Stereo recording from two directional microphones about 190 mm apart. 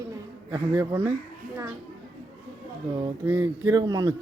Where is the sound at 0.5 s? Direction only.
15° right (ahead or behind).